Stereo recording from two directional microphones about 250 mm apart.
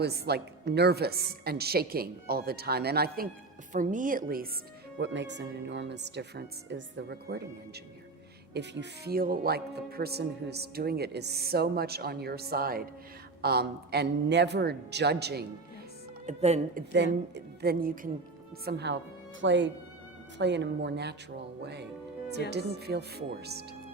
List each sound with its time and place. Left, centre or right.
0.0 s speech: right
4.9 s speech: right
16.2 s speech: right
16.9 s speech: right